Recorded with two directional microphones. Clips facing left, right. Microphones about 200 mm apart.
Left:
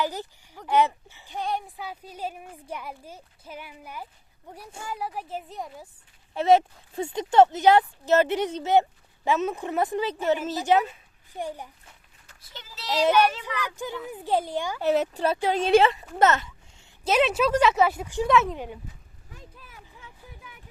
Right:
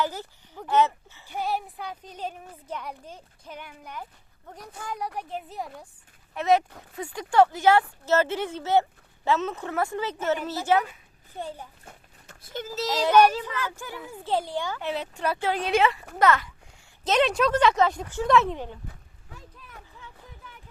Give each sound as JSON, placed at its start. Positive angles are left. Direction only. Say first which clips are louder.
{"t": 0.0, "sound": "speech", "louder": "even", "side_deg": 15}
{"t": 1.3, "sound": "a woman's voice", "louder": "right 1 dB", "side_deg": -5}
{"t": 6.3, "sound": "a woman's voice", "louder": "left 3 dB", "side_deg": 30}
{"t": 11.9, "sound": "a sound", "louder": "right 7 dB", "side_deg": -50}
{"t": 13.4, "sound": "a woman's voice", "louder": "left 1 dB", "side_deg": 15}
{"t": 14.8, "sound": "speech", "louder": "left 8 dB", "side_deg": 45}
{"t": 15.4, "sound": "speech", "louder": "left 4 dB", "side_deg": 20}
{"t": 17.0, "sound": "a woman's voice", "louder": "even", "side_deg": 10}